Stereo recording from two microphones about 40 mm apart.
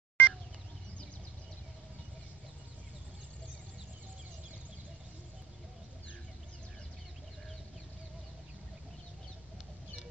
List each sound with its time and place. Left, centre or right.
0.2 s fowl: left